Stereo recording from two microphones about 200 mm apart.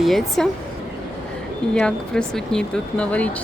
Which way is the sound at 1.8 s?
5° left (ahead or behind).